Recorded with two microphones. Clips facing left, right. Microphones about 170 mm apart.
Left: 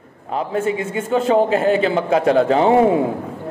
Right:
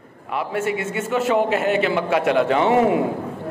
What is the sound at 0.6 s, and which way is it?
A man's voice, 30° left (ahead or behind).